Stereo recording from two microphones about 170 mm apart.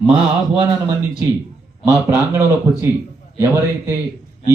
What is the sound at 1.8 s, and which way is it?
A man's voice, 15° right (ahead or behind).